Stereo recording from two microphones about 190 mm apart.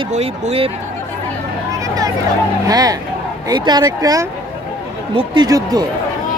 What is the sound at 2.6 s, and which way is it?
Speech, 20° right (ahead or behind).